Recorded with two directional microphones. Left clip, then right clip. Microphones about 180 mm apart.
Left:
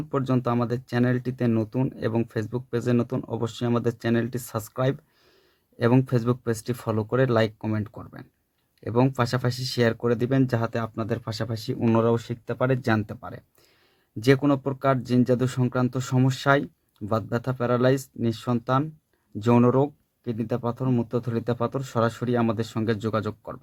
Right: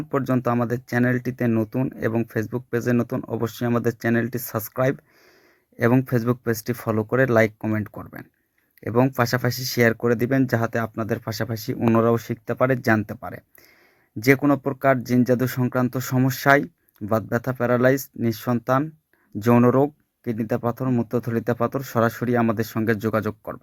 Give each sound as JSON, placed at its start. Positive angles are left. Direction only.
{"t": 0.1, "sound": "speech", "side_deg": -15}
{"t": 6.1, "sound": "speech", "side_deg": -15}